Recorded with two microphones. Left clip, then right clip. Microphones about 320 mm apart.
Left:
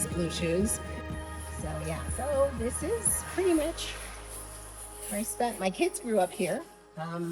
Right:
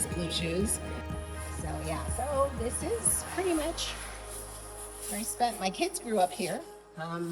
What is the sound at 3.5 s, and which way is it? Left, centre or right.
Speech, centre.